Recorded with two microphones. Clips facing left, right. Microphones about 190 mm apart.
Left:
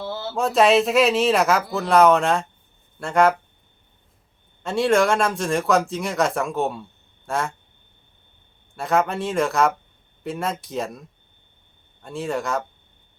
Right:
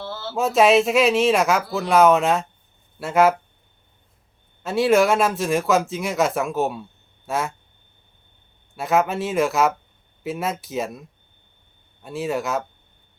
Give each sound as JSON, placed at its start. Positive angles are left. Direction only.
{"t": 0.0, "sound": "a sound", "side_deg": 15}
{"t": 0.3, "sound": "speech", "side_deg": 0}
{"t": 4.6, "sound": "speech", "side_deg": -5}
{"t": 8.7, "sound": "speech", "side_deg": 0}
{"t": 12.0, "sound": "speech", "side_deg": -5}